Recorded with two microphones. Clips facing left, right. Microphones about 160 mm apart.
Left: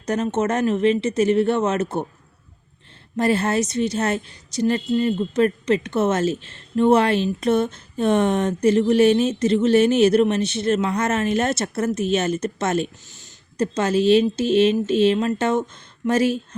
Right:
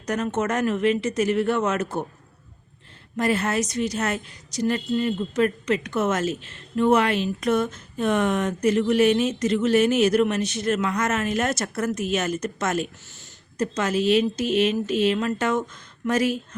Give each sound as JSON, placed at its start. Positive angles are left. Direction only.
{"t": 0.0, "sound": "a woman's voice", "side_deg": 25}
{"t": 3.2, "sound": "a woman's voice", "side_deg": 30}
{"t": 13.1, "sound": "a sound", "side_deg": 15}
{"t": 13.6, "sound": "a woman's voice", "side_deg": 30}